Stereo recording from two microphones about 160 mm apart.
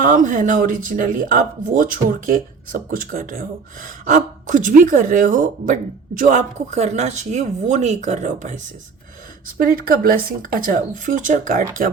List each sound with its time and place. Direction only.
0.0 s speech: 55° right (ahead or behind)
9.6 s speech: 65° right (ahead or behind)